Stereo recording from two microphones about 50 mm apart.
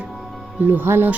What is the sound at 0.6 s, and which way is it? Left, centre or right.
Speech, right.